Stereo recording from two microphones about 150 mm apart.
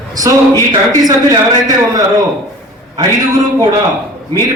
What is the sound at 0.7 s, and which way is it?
A man's voice, 25° right (ahead or behind).